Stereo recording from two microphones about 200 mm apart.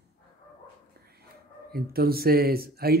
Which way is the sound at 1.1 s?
50° right (ahead or behind).